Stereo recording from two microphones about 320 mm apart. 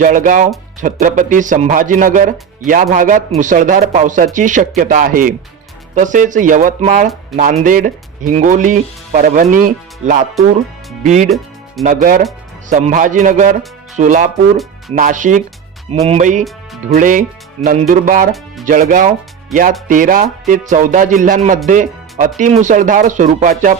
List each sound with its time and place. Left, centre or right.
0.0 s speech: right